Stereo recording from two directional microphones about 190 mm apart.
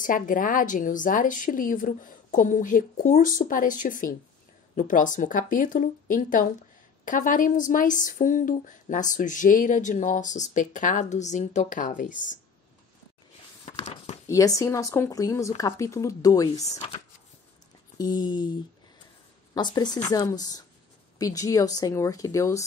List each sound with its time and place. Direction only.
0.0 s speech: 45° left (ahead or behind)
13.8 s speech: 35° left (ahead or behind)
14.2 s speech: 15° left (ahead or behind)
17.9 s speech: 20° left (ahead or behind)